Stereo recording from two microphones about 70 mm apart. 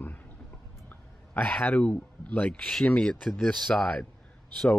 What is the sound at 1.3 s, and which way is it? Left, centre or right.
A man's voice, left.